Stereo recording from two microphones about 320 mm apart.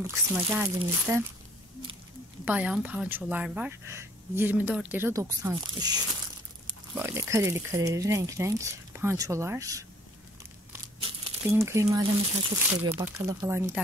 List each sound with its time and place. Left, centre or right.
0.0 s speech: centre
2.4 s speech: centre
7.0 s speech: centre